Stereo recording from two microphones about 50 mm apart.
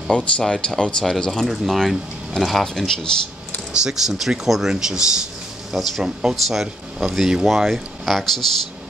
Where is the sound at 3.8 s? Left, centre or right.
Centre.